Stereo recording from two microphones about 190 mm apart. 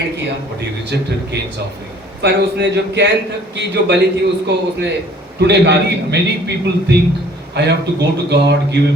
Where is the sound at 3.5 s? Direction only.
65° right (ahead or behind).